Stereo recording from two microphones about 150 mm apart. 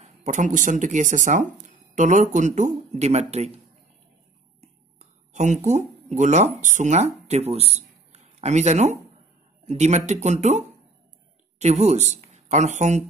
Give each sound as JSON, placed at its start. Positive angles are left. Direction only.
{"t": 0.2, "sound": "speech", "side_deg": -55}
{"t": 4.6, "sound": "whispering", "side_deg": -50}
{"t": 6.6, "sound": "speech", "side_deg": -55}